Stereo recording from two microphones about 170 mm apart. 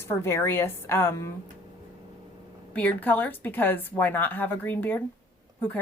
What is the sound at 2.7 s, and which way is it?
A woman's voice, 10° left (ahead or behind).